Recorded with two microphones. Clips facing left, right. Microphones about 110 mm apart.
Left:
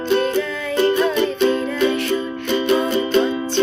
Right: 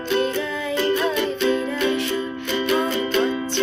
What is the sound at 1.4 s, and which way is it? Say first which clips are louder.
Music: left 3 dB; 30° left (ahead or behind).